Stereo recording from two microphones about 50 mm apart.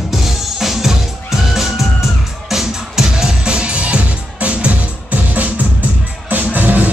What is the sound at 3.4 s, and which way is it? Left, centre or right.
Music, centre.